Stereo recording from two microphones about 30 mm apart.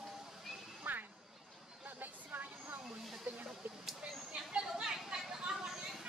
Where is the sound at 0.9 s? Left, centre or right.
Right.